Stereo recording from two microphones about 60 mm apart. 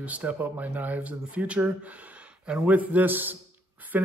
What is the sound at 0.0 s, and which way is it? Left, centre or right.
Speech, right.